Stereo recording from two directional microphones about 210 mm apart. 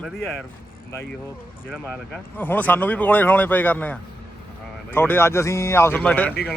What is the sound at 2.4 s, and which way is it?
Speech, 10° left (ahead or behind).